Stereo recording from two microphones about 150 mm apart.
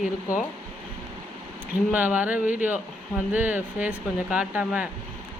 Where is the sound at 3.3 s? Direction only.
10° right (ahead or behind).